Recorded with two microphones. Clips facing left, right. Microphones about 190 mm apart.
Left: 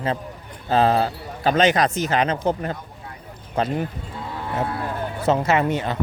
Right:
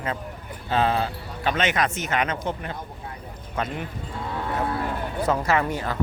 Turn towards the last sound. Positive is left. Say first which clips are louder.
# left 3 dB
turn(degrees=20)  # may be behind; listen again after turning